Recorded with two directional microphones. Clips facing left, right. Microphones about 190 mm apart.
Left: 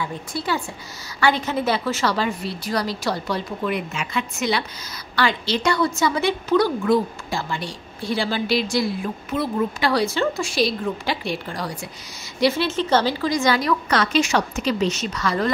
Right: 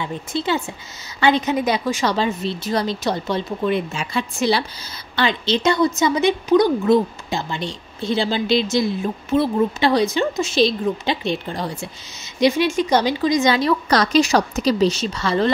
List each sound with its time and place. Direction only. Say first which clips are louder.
0.0 s a woman's voice: right 3 dB; 25° right (ahead or behind)
5.1 s a woman's voice: right 2 dB; 20° right (ahead or behind)